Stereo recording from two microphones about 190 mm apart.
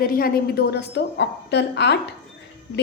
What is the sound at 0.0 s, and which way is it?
A woman's voice, 50° left (ahead or behind).